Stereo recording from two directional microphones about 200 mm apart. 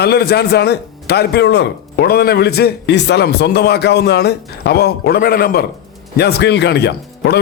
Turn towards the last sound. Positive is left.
turn(degrees=55)  # may be behind; listen again after turning